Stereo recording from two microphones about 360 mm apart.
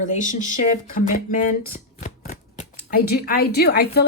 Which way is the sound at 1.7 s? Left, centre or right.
Left.